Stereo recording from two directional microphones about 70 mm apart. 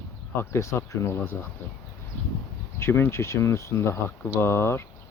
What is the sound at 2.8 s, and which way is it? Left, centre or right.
Speech, left.